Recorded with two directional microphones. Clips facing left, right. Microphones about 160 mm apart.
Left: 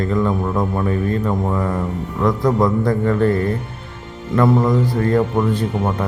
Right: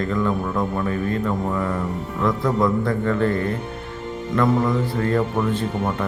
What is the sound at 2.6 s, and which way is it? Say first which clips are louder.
Speech: left 3 dB; 40° left (ahead or behind).